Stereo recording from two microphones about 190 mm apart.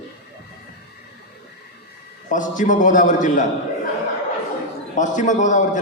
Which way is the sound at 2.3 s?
40° left (ahead or behind).